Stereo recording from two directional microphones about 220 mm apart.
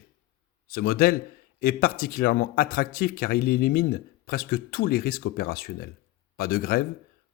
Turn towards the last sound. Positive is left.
turn(degrees=45)  # may be behind; listen again after turning